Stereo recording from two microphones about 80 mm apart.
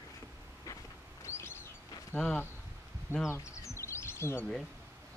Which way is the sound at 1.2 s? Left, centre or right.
Left.